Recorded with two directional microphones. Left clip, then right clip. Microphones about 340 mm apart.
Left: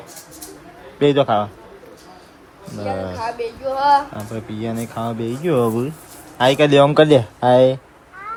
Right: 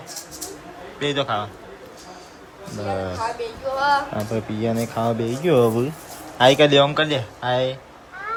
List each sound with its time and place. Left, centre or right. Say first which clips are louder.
0.9 s speech: left 8 dB; centre
2.8 s speech: left 1 dB; centre
3.4 s a sound: left 5 dB; centre
4.3 s speech: right 3 dB; centre